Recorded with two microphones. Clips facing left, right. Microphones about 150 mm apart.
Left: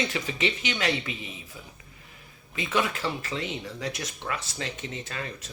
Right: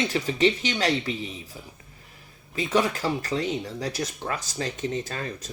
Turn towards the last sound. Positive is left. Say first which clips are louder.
# right 3 dB
turn(degrees=-40)  # may be behind; listen again after turning